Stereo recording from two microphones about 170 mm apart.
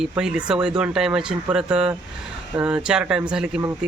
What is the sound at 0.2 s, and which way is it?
Speech, 5° right (ahead or behind).